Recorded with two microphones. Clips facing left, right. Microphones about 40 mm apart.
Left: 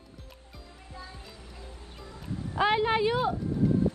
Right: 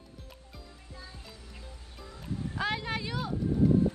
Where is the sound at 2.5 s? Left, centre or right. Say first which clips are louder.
Left 9 dB; left.